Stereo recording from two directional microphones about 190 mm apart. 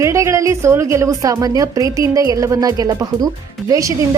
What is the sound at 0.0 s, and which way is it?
A woman's voice, 15° right (ahead or behind).